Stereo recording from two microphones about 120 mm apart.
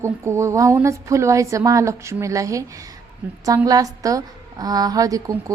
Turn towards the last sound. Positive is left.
turn(degrees=-30)  # may be behind; listen again after turning